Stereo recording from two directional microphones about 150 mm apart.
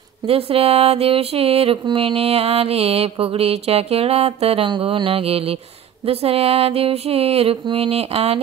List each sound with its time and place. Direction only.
0.3 s music: 40° right (ahead or behind)